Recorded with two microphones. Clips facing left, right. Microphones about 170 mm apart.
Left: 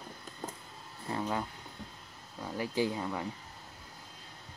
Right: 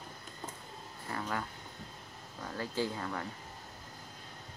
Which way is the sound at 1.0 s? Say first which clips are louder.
Left 4 dB; 20° left (ahead or behind).